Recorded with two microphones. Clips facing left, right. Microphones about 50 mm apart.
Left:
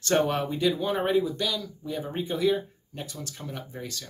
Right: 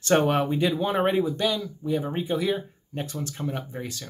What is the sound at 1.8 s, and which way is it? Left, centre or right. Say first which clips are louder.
Speech: right 6 dB; centre.